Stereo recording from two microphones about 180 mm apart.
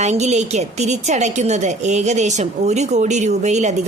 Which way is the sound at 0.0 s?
40° right (ahead or behind).